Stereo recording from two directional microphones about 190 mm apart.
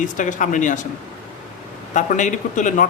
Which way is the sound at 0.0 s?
40° left (ahead or behind).